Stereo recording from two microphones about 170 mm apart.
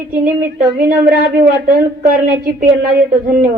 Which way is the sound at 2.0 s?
55° right (ahead or behind).